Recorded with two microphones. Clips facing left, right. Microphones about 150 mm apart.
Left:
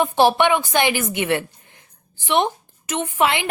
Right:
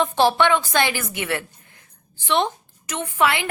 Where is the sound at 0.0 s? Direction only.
15° left (ahead or behind).